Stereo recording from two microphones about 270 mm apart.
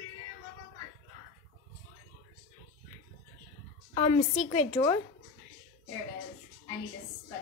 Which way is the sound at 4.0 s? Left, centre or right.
Left.